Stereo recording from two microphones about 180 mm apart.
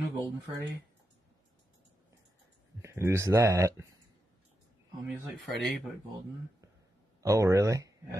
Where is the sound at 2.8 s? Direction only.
15° right (ahead or behind).